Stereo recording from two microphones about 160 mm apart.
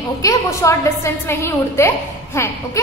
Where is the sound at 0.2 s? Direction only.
20° left (ahead or behind).